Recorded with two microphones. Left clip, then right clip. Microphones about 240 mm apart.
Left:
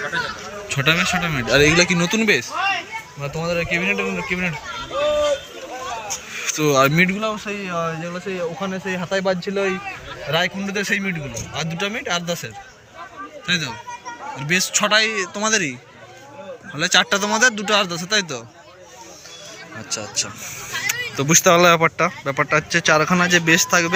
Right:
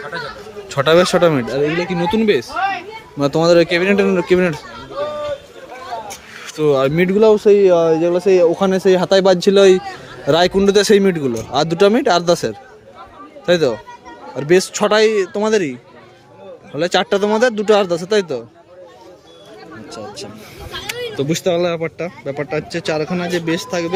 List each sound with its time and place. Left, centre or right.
0.7 s speech: right
1.5 s speech: left
1.9 s a man's voice: centre
3.2 s speech: right
6.4 s speech: centre
7.2 s a man's voice: right
19.9 s a man's voice: centre
20.8 s a sound: centre
21.6 s a man's voice: left
21.9 s a man's voice: centre